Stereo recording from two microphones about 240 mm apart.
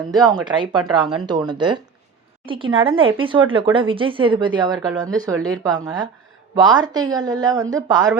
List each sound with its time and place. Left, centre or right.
0.1 s speech: centre